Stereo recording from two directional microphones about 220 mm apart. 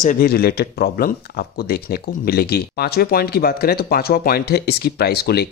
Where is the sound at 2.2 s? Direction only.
45° left (ahead or behind).